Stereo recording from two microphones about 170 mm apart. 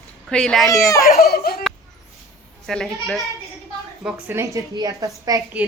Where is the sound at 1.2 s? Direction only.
70° left (ahead or behind).